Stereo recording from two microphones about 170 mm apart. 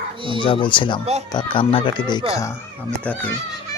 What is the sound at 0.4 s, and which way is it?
A child's voice, 30° left (ahead or behind).